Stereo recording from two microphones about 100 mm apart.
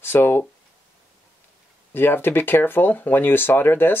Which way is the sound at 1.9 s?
20° left (ahead or behind).